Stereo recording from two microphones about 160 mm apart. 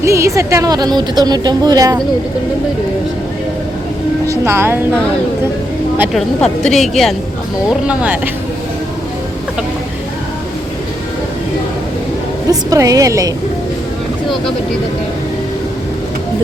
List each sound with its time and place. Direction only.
0.0 s a woman's voice: 20° right (ahead or behind)
4.3 s speech: 15° right (ahead or behind)
6.1 s a woman's voice: 5° left (ahead or behind)
12.5 s a woman's voice: 20° right (ahead or behind)